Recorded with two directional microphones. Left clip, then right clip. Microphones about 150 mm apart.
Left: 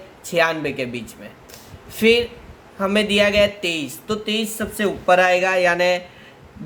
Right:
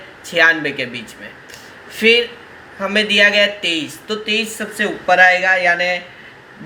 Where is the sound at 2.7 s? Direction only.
40° left (ahead or behind).